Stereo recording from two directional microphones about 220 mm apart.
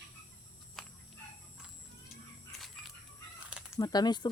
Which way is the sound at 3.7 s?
15° left (ahead or behind).